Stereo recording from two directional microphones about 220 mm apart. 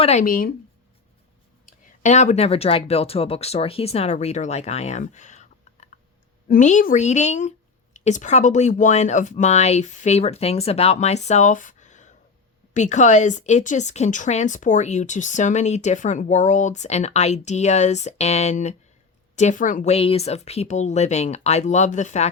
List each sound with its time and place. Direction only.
0.0 s speech: 30° left (ahead or behind)
1.6 s speech: 30° left (ahead or behind)